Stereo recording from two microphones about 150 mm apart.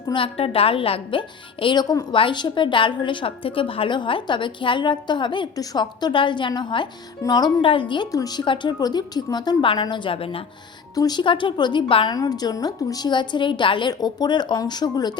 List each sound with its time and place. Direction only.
0.1 s a woman's voice: 40° left (ahead or behind)
10.9 s a woman's voice: 25° left (ahead or behind)